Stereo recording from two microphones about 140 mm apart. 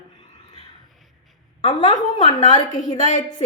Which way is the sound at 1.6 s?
35° left (ahead or behind).